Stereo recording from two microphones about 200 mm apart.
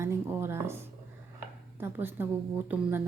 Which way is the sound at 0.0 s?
15° right (ahead or behind).